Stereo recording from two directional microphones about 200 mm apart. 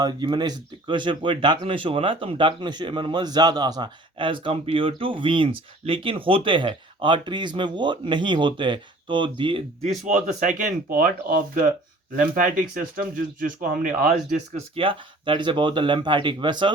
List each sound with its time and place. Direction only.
0.0 s speech: 20° right (ahead or behind); by 14.3 s 40° right (ahead or behind)
14.8 s speech: 25° right (ahead or behind)